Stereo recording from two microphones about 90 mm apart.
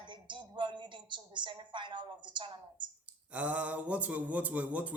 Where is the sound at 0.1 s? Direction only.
60° right (ahead or behind).